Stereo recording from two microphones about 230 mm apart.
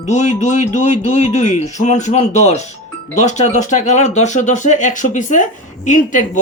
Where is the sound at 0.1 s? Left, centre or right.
Left.